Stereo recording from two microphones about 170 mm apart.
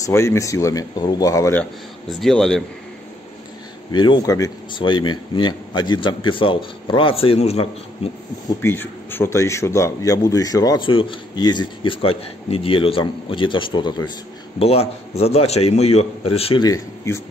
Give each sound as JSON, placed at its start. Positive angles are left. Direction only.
{"t": 0.0, "sound": "a man's voice", "side_deg": 15}
{"t": 1.6, "sound": "speech", "side_deg": 0}
{"t": 3.9, "sound": "a man's voice", "side_deg": 25}
{"t": 8.5, "sound": "a man's voice", "side_deg": 10}
{"t": 14.6, "sound": "a man's voice", "side_deg": 35}
{"t": 16.6, "sound": "a man's voice", "side_deg": 20}